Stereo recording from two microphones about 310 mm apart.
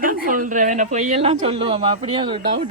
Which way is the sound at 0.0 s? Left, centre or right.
Right.